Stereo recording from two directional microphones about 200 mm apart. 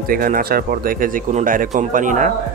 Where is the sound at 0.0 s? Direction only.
45° right (ahead or behind).